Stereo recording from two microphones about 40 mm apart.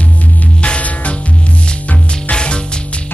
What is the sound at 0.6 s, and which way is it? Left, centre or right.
Music, left.